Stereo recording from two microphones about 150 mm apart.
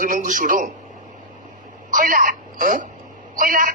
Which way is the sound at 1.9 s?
65° right (ahead or behind).